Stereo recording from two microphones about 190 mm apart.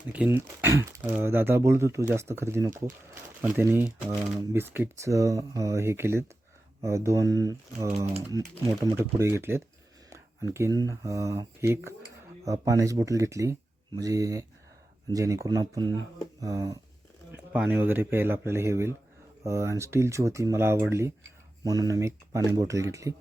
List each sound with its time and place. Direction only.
0.1 s speech: 10° right (ahead or behind)
7.9 s speech: 35° right (ahead or behind)
9.0 s speech: 15° right (ahead or behind)
10.8 s speech: 15° right (ahead or behind)
17.3 s speech: 10° right (ahead or behind)